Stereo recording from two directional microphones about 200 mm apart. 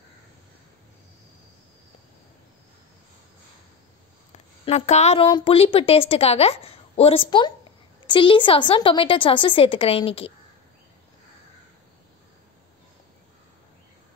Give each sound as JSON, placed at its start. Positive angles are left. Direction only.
{"t": 4.6, "sound": "a woman's voice", "side_deg": 35}